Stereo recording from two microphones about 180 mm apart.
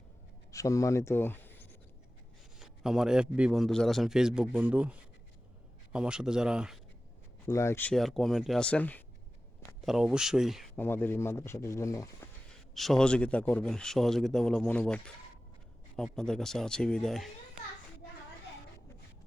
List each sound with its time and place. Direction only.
0.5 s speech: 20° left (ahead or behind)
2.6 s a man's voice: 5° right (ahead or behind)
7.4 s speech: 15° left (ahead or behind)
9.8 s a man's voice: 5° right (ahead or behind)
10.8 s speech: 10° left (ahead or behind)
12.7 s a man's voice: centre (ahead or behind)